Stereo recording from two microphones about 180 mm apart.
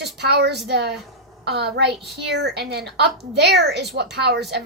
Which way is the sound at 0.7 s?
65° right (ahead or behind).